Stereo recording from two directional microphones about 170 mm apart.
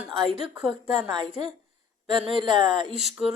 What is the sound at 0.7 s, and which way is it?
A woman's voice, 25° right (ahead or behind).